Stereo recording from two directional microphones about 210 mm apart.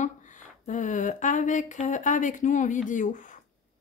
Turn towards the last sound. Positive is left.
turn(degrees=35)  # may be behind; listen again after turning